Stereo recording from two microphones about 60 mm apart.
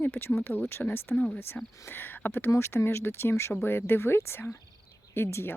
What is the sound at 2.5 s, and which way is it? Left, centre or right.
Speech, left.